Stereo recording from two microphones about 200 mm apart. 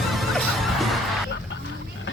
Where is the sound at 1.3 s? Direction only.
65° left (ahead or behind).